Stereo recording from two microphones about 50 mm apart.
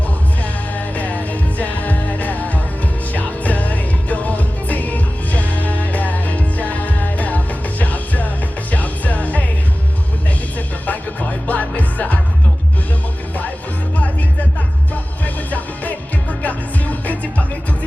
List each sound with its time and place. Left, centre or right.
0.9 s music: left
10.8 s music: left
15.2 s music: left